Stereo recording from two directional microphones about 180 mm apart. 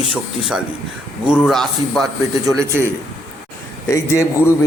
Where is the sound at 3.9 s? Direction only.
15° left (ahead or behind).